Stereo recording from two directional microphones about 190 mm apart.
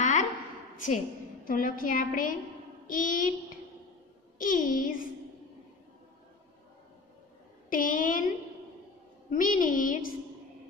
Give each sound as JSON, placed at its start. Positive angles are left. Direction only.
{"t": 0.0, "sound": "a sound", "side_deg": 40}
{"t": 0.7, "sound": "a woman's voice", "side_deg": 45}
{"t": 4.4, "sound": "a woman's voice", "side_deg": 45}
{"t": 7.7, "sound": "a woman's voice", "side_deg": 45}
{"t": 9.3, "sound": "a woman's voice", "side_deg": 45}